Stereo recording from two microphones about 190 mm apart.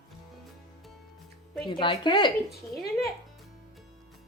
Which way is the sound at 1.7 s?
25° left (ahead or behind).